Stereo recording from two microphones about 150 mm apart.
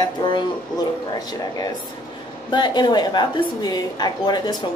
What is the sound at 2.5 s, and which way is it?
A woman's voice, 30° left (ahead or behind).